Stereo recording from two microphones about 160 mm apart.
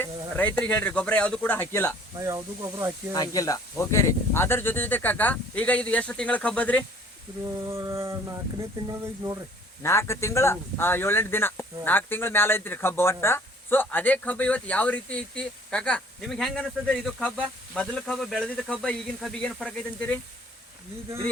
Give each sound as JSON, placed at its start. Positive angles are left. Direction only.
{"t": 0.0, "sound": "speech", "side_deg": 10}
{"t": 2.1, "sound": "speech", "side_deg": -20}
{"t": 3.1, "sound": "speech", "side_deg": 20}
{"t": 7.7, "sound": "speech", "side_deg": -20}
{"t": 9.8, "sound": "speech", "side_deg": 15}